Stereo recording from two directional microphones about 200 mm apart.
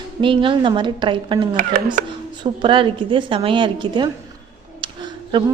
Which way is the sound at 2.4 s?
25° right (ahead or behind).